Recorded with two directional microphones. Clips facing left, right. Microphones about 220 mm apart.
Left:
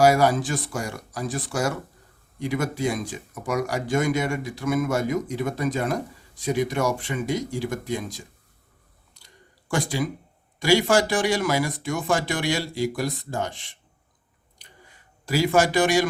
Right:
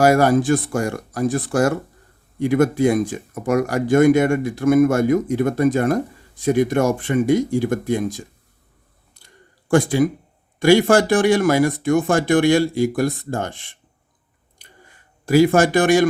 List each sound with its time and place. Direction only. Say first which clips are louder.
0.0 s speech: right 4 dB; 55° right (ahead or behind)
9.1 s a sound: right 4 dB; 55° right (ahead or behind)
10.6 s speech: right 6 dB; 55° right (ahead or behind)
15.3 s speech: right 7 dB; 55° right (ahead or behind)